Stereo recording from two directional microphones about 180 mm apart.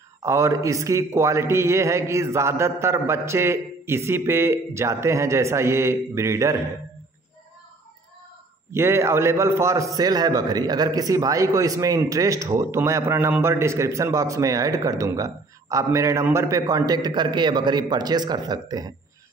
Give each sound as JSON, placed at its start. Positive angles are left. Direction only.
{"t": 0.2, "sound": "a man's voice", "side_deg": -15}
{"t": 8.7, "sound": "a man's voice", "side_deg": -15}